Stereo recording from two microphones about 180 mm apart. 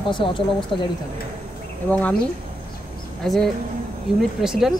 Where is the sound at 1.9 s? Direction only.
10° left (ahead or behind).